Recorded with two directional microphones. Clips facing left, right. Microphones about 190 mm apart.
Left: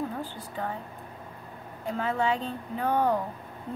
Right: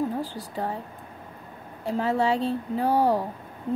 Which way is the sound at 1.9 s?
35° right (ahead or behind).